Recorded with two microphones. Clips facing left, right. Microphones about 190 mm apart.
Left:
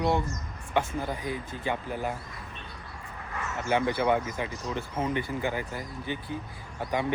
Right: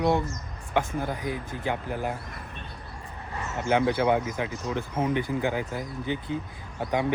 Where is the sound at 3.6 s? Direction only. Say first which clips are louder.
Right 3 dB; 15° right (ahead or behind).